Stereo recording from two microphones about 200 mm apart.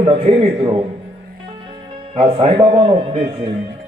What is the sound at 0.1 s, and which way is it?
Speech, 30° right (ahead or behind).